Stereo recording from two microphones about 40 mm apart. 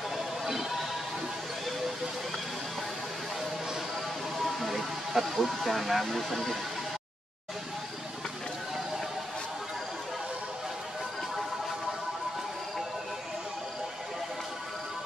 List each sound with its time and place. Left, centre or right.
0.5 s music: centre
4.4 s speech: centre